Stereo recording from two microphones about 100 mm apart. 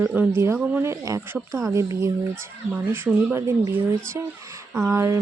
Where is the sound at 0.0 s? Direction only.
20° right (ahead or behind).